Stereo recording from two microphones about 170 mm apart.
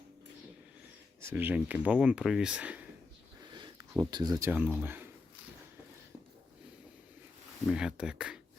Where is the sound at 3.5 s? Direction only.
25° right (ahead or behind).